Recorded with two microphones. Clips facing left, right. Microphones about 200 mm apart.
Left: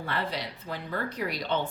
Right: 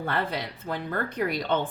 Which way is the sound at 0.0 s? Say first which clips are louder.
Right 3 dB; 50° right (ahead or behind).